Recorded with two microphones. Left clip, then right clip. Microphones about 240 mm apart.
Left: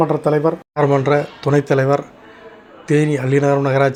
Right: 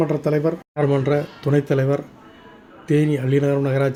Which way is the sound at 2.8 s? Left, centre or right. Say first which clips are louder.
Left 3 dB; right.